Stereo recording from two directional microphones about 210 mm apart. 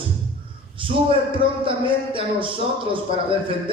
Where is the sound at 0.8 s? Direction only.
25° right (ahead or behind).